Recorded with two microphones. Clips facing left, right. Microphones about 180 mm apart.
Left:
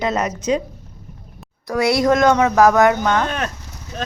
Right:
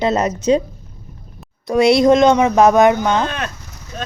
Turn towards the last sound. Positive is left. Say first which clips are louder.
# right 2 dB
turn(degrees=-20)  # may be behind; listen again after turning